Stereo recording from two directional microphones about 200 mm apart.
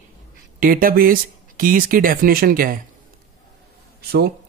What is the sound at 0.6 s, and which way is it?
Speech, 45° right (ahead or behind).